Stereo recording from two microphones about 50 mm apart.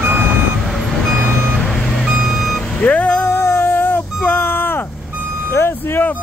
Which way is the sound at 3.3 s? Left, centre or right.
Left.